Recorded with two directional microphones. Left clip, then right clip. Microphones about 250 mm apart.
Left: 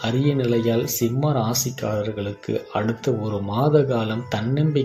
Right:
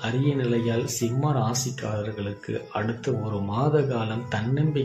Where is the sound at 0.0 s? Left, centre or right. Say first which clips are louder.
Left 4 dB; centre.